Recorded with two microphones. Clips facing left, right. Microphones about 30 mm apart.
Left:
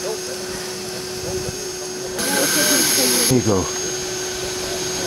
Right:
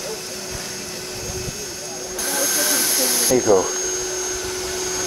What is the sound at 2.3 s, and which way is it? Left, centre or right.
Vehicle, left.